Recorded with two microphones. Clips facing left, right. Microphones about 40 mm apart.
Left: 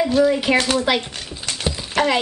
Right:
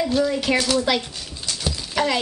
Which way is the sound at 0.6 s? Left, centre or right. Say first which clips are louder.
Left 2 dB; left.